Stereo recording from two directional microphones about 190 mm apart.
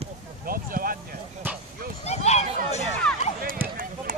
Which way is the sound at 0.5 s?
50° right (ahead or behind).